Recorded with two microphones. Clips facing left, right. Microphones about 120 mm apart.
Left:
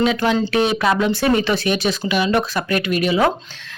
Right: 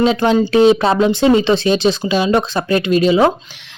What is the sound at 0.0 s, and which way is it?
Speech, 30° right (ahead or behind).